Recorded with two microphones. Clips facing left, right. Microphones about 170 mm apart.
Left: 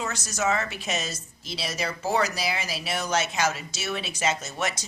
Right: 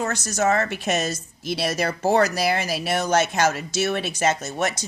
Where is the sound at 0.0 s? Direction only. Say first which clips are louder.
Right 5 dB; 50° right (ahead or behind).